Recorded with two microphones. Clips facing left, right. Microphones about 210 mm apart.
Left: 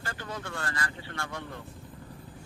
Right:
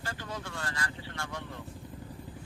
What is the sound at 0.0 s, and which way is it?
Vehicle, 55° left (ahead or behind).